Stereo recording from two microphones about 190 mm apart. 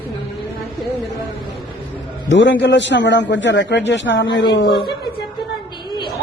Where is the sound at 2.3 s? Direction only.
70° left (ahead or behind).